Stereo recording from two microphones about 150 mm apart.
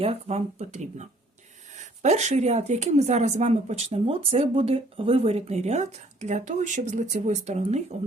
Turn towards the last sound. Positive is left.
turn(degrees=-50)  # may be behind; listen again after turning